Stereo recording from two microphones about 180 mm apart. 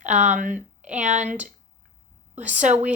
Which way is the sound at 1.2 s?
5° right (ahead or behind).